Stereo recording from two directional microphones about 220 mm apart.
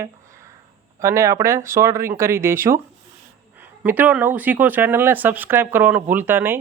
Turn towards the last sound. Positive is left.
turn(degrees=-10)  # may be behind; listen again after turning